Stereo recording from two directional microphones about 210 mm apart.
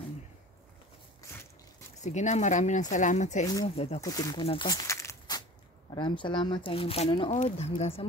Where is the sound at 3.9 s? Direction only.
15° left (ahead or behind).